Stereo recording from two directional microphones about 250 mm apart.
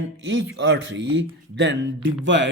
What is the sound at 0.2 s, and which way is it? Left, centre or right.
Speech, right.